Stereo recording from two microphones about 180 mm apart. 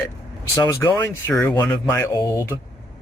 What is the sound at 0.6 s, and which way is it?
Speech, 15° left (ahead or behind).